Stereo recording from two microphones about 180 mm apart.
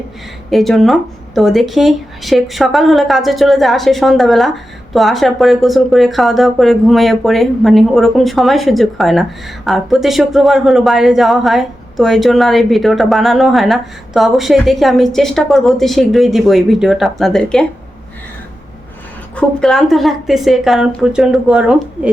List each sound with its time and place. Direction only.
0.5 s speech: centre (ahead or behind)
19.4 s speech: 5° left (ahead or behind)